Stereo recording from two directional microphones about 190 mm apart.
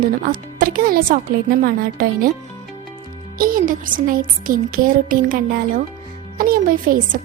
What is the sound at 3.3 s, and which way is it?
A woman's voice, 50° right (ahead or behind).